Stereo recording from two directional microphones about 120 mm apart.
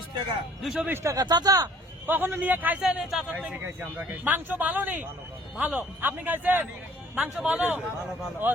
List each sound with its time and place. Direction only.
0.6 s a man's voice: centre (ahead or behind)
1.0 s speech: 30° right (ahead or behind)
2.0 s a man's voice: 15° right (ahead or behind)